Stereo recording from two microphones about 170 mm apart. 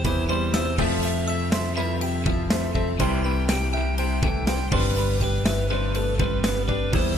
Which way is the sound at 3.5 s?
Centre (ahead or behind).